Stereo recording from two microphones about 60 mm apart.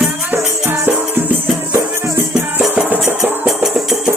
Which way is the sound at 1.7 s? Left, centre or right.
Right.